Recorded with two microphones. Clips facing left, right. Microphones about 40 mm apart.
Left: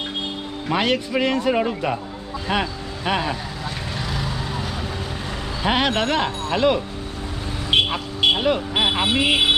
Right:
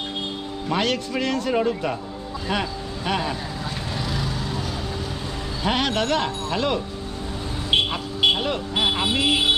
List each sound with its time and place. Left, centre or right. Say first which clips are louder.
0.7 s a man's voice: left 3 dB; centre
4.1 s vehicle: left 1 dB; centre
5.7 s a man's voice: left 2 dB; centre
7.9 s speech: left 1 dB; centre